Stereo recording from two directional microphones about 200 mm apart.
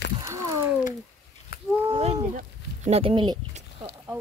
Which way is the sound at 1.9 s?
30° right (ahead or behind).